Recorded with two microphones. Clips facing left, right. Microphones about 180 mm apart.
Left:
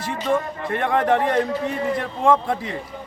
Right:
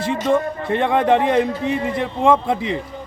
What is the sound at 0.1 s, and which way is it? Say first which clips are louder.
A man's voice: right 3 dB; 20° right (ahead or behind).